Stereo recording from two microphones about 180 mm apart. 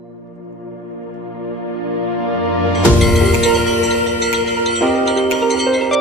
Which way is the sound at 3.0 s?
Centre (ahead or behind).